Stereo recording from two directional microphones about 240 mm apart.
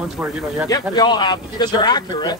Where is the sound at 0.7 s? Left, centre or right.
Centre.